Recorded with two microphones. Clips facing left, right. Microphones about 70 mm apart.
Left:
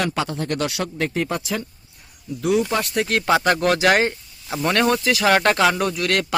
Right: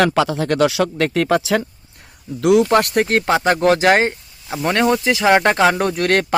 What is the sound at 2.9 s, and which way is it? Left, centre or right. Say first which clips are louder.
Speech: right 5 dB; right.